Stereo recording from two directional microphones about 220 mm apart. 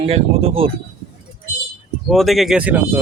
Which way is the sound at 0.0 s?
25° right (ahead or behind).